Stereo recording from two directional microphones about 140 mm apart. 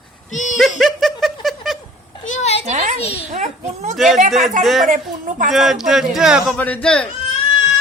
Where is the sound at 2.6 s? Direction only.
55° right (ahead or behind).